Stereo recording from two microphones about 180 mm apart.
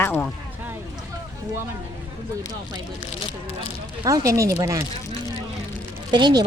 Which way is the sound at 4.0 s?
15° right (ahead or behind).